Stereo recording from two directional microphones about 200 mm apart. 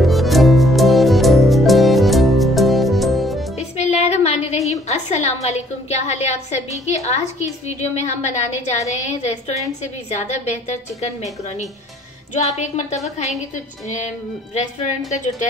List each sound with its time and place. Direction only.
0.0 s music: centre (ahead or behind)
3.5 s a woman's voice: 35° left (ahead or behind)
12.4 s a woman's voice: 35° left (ahead or behind)